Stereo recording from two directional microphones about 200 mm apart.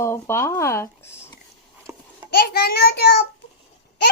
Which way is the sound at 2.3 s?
50° left (ahead or behind).